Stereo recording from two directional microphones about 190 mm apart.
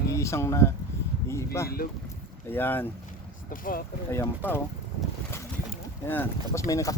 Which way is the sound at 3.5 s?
45° left (ahead or behind).